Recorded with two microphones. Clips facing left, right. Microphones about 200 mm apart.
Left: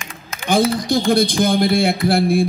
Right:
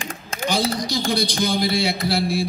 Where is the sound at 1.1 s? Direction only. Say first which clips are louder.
Left 6 dB; 50° left (ahead or behind).